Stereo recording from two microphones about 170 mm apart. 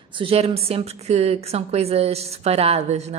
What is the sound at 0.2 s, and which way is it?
Speech, 35° right (ahead or behind).